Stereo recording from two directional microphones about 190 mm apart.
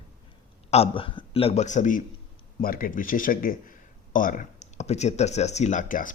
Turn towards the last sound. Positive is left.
turn(degrees=45)  # may be behind; listen again after turning